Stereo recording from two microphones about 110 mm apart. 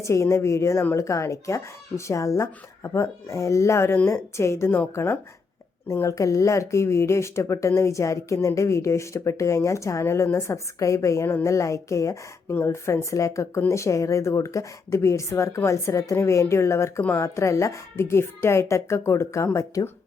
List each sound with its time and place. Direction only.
0.0 s speech: 25° left (ahead or behind)